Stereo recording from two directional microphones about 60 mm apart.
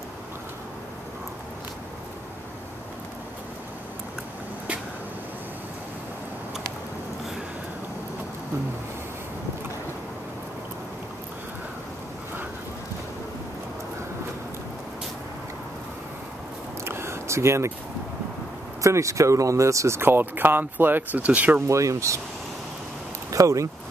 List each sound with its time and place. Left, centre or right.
16.8 s a sound: right
18.8 s speech: right
20.0 s speech: right
21.6 s speech: right
23.3 s speech: right